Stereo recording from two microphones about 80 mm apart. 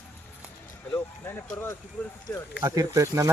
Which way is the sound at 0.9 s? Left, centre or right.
Left.